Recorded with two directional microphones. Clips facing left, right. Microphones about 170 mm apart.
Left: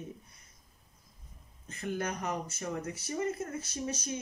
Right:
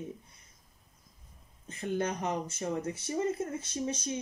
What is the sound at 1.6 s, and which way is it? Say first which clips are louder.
Speech: right 3 dB; 20° right (ahead or behind).